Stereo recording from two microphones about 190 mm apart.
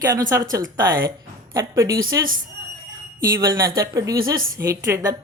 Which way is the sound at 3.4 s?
15° right (ahead or behind).